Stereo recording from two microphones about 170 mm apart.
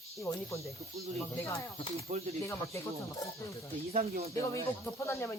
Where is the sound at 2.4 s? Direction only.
15° left (ahead or behind).